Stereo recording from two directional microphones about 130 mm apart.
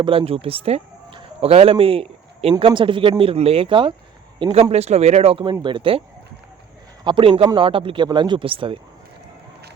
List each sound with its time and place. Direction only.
0.0 s a man's voice: 45° right (ahead or behind)
4.7 s speech: 55° right (ahead or behind)
5.6 s speech: 40° right (ahead or behind)
7.0 s speech: 40° right (ahead or behind)